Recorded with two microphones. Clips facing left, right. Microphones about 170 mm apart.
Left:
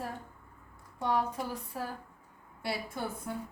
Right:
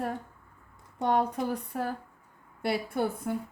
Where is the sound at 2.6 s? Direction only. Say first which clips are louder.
Right 7 dB; 55° right (ahead or behind).